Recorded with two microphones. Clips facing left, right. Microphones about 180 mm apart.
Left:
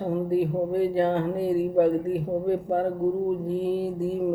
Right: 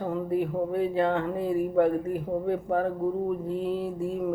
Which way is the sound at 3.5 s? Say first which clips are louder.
Left 3 dB; 30° left (ahead or behind).